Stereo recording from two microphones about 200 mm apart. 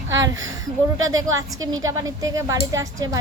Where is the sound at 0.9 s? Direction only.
80° right.